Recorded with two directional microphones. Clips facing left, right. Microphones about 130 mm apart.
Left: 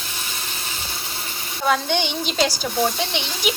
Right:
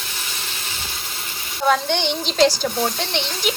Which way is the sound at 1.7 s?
5° left (ahead or behind).